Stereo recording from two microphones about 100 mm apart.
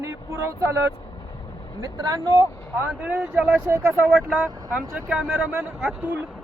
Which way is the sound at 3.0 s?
10° right (ahead or behind).